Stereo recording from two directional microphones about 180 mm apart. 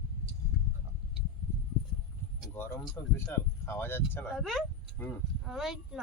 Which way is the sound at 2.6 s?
10° left (ahead or behind).